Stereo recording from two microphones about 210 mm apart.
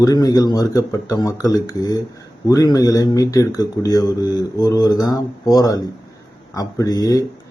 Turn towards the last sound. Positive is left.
turn(degrees=15)  # may be behind; listen again after turning